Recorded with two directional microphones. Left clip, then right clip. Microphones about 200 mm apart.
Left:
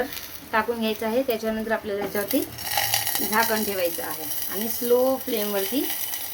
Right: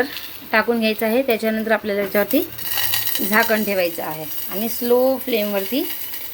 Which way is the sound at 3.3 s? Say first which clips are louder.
Right 6 dB; 20° right (ahead or behind).